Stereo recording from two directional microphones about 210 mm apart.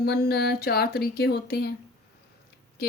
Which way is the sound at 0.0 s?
50° left (ahead or behind).